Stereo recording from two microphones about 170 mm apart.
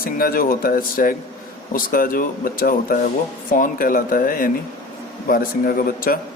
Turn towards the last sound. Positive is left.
turn(degrees=60)  # may be behind; listen again after turning